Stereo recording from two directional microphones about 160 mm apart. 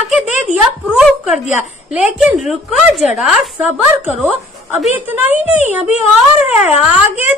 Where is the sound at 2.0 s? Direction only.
5° right (ahead or behind).